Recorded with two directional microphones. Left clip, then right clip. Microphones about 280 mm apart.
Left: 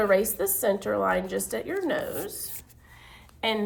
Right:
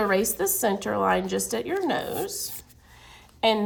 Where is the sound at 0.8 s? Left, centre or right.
Right.